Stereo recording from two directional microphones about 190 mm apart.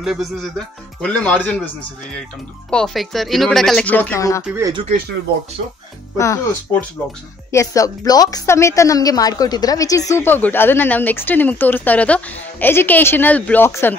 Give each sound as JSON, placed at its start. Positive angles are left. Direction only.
{"t": 0.0, "sound": "speech", "side_deg": 0}
{"t": 2.7, "sound": "speech", "side_deg": 0}
{"t": 4.5, "sound": "speech", "side_deg": -15}
{"t": 6.1, "sound": "a woman's voice", "side_deg": 15}